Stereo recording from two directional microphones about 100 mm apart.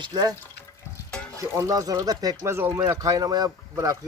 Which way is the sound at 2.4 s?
25° right (ahead or behind).